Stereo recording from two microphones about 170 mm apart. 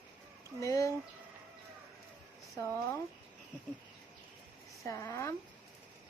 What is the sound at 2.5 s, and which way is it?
Speech, 15° left (ahead or behind).